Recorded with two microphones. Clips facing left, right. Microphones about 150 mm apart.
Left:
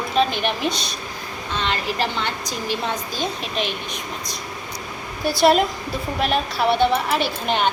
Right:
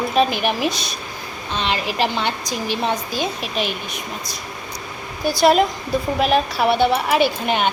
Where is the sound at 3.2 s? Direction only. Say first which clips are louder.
Right 2 dB; 5° right (ahead or behind).